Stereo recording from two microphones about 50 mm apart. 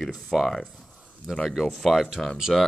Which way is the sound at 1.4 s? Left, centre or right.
Centre.